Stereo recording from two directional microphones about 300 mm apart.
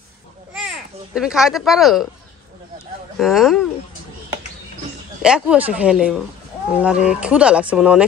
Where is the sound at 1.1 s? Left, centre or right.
Centre.